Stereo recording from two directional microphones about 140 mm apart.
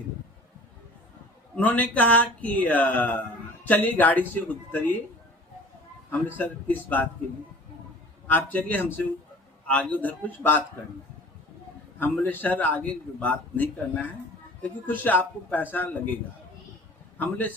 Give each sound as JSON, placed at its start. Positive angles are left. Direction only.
{"t": 1.5, "sound": "speech", "side_deg": 10}
{"t": 6.1, "sound": "speech", "side_deg": 15}
{"t": 8.3, "sound": "speech", "side_deg": 10}
{"t": 11.9, "sound": "speech", "side_deg": 10}
{"t": 17.2, "sound": "speech", "side_deg": 10}